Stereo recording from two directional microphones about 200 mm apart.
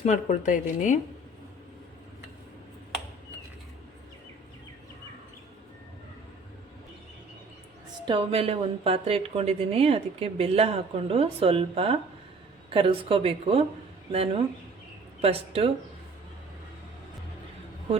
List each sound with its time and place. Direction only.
0.0 s speech: 35° left (ahead or behind)
8.0 s a woman's voice: 25° right (ahead or behind)